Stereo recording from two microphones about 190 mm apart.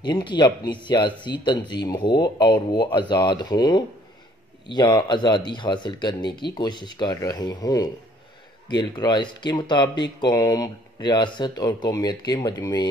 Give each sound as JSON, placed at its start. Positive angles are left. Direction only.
{"t": 0.0, "sound": "speech", "side_deg": 25}